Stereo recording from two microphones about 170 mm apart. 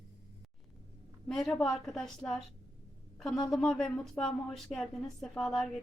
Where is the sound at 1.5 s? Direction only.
Centre (ahead or behind).